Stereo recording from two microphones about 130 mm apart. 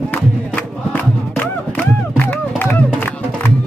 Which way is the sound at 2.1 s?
15° left (ahead or behind).